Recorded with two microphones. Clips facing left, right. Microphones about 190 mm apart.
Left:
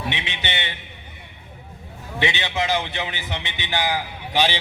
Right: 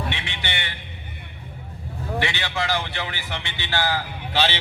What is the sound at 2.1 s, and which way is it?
A man's voice, 20° left (ahead or behind).